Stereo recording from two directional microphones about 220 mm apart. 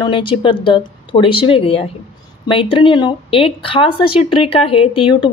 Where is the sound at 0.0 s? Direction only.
20° left (ahead or behind).